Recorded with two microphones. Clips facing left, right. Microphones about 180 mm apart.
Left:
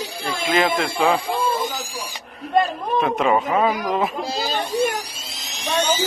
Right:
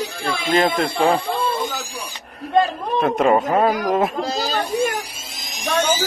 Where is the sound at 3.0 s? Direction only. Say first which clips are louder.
Right 3 dB; 45° right (ahead or behind).